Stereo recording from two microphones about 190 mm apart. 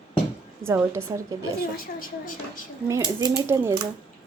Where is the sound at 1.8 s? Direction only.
45° left (ahead or behind).